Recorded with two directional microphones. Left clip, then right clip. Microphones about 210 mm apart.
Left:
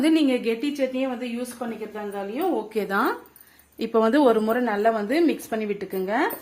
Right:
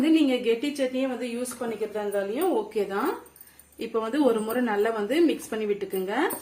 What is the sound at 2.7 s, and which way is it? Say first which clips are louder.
A woman's voice: left 3 dB; 55° left (ahead or behind).